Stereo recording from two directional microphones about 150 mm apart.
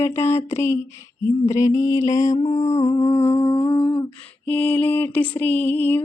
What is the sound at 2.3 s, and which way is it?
Humming, 45° left (ahead or behind).